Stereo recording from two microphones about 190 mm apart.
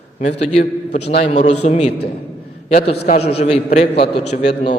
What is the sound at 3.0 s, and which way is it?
A man's voice, 35° left (ahead or behind).